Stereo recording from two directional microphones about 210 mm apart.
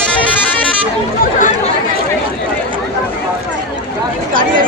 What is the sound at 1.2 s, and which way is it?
Chatter, 35° left (ahead or behind).